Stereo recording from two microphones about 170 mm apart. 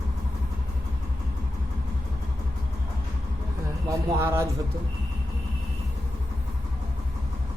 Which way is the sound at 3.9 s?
15° right (ahead or behind).